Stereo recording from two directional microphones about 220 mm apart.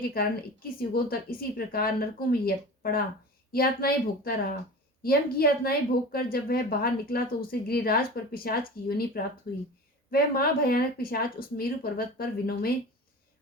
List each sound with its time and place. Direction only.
0.2 s a woman's voice: 40° left (ahead or behind)